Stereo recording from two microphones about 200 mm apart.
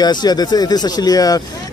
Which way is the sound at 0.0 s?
20° left (ahead or behind).